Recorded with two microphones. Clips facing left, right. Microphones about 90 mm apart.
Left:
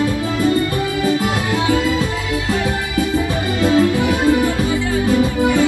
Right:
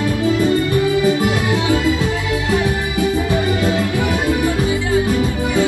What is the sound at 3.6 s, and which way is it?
Music, 15° right (ahead or behind).